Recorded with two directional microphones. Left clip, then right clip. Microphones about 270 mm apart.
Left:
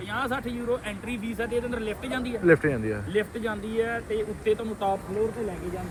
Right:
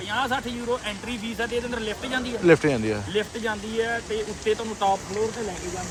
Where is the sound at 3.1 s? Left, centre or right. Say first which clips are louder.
Right 1 dB; centre.